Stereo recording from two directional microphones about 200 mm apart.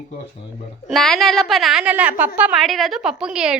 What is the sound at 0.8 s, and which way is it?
A woman's voice, centre (ahead or behind).